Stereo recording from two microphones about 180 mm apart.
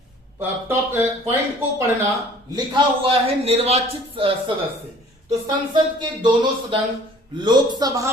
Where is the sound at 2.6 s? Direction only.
30° right (ahead or behind).